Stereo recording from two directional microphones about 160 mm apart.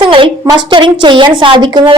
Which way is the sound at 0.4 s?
30° right (ahead or behind).